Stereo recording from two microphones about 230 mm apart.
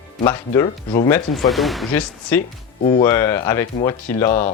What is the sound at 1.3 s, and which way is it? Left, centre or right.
Speech, centre.